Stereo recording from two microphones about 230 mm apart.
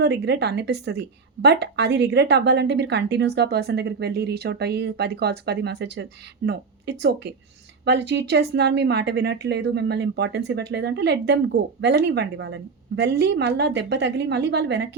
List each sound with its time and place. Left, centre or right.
0.0 s a woman's voice: right